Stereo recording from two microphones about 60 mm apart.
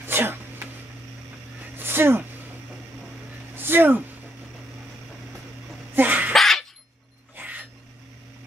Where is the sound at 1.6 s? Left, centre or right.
Right.